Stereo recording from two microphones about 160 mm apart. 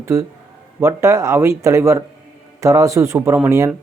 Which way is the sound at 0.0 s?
15° right (ahead or behind).